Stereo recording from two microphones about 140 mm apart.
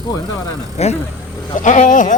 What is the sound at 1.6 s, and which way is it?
Speech, 60° left (ahead or behind).